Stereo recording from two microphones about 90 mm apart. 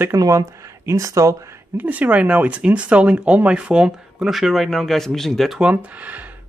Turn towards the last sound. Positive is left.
turn(degrees=-20)  # may be behind; listen again after turning